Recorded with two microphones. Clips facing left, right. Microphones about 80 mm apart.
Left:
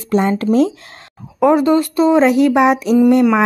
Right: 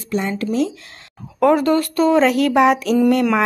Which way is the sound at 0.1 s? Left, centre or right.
Left.